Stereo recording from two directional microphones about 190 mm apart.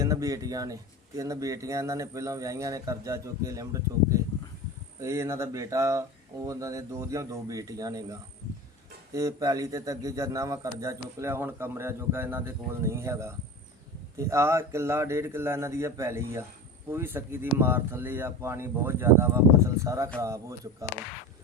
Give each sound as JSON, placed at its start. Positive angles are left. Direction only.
{"t": 0.0, "sound": "speech", "side_deg": -20}